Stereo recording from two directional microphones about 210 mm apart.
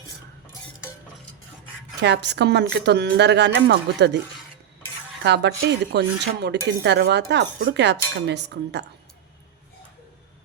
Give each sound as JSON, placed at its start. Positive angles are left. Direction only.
{"t": 2.0, "sound": "speech", "side_deg": -55}
{"t": 5.2, "sound": "speech", "side_deg": -55}